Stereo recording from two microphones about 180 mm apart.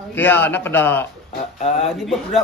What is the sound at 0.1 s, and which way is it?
Speech, 10° left (ahead or behind).